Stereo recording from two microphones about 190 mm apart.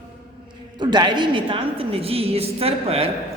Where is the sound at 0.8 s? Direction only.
25° right (ahead or behind).